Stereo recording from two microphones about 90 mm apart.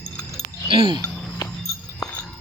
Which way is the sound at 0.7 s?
65° right (ahead or behind).